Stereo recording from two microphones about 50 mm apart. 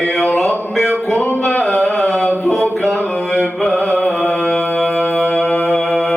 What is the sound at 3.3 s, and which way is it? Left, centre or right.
Music, left.